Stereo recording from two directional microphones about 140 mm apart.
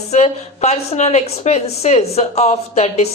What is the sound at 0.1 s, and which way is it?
Speech, 50° left (ahead or behind).